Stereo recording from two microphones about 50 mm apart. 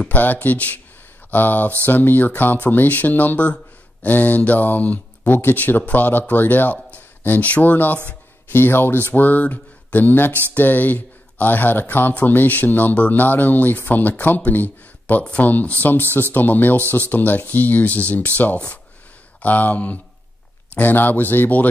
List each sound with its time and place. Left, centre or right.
0.1 s speech: left